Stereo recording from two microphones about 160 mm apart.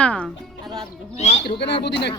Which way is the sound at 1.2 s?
40° left (ahead or behind).